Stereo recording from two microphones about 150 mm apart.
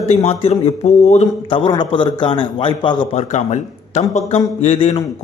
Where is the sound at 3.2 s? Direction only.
50° left (ahead or behind).